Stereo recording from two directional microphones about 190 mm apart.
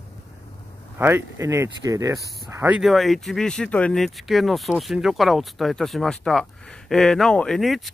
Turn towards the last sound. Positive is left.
turn(degrees=0)  # may be behind; listen again after turning